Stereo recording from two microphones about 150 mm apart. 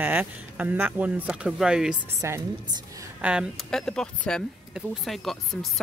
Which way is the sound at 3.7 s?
5° left (ahead or behind).